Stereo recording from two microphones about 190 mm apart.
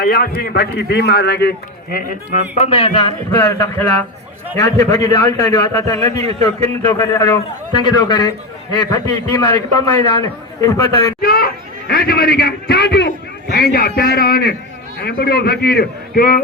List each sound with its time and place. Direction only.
0.0 s a man's voice: 50° left (ahead or behind)
2.6 s speech: 30° left (ahead or behind)
3.3 s a man's voice: 15° left (ahead or behind)
11.2 s a man's voice: 50° left (ahead or behind)